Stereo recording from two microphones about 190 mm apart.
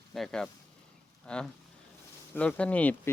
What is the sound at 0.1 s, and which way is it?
Speech, centre (ahead or behind).